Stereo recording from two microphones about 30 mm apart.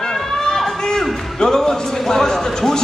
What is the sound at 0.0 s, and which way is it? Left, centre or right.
Chatter, centre.